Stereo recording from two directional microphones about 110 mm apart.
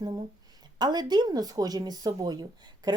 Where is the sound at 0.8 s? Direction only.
40° right (ahead or behind).